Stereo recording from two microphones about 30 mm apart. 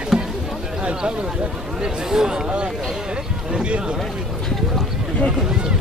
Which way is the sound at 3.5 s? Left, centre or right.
Right.